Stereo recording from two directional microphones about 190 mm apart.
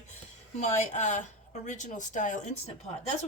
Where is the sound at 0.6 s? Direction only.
40° left (ahead or behind).